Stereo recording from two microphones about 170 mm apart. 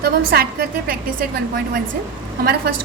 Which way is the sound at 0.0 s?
70° right (ahead or behind).